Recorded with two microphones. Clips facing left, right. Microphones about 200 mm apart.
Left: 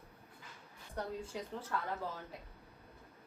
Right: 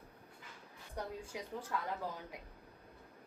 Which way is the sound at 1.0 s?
10° right (ahead or behind).